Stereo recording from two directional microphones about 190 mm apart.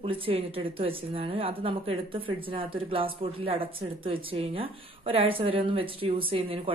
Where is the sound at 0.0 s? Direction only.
30° right (ahead or behind).